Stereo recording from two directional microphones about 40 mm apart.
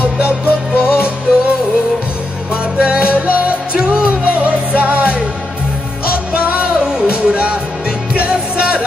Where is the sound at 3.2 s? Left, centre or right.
Right.